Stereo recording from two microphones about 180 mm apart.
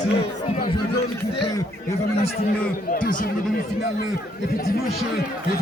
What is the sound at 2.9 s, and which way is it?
Speech, 45° left (ahead or behind).